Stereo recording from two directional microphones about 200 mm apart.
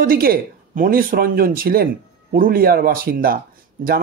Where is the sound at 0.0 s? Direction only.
45° right (ahead or behind).